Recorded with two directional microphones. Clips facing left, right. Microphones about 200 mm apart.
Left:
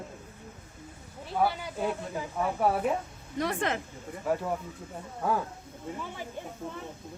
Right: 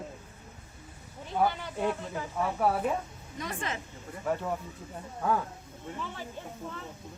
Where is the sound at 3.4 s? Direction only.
65° left (ahead or behind).